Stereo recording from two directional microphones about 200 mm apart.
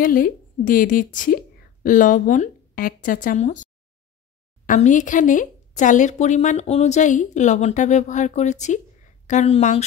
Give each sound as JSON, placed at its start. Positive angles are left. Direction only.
{"t": 0.0, "sound": "speech", "side_deg": 45}
{"t": 4.6, "sound": "speech", "side_deg": 40}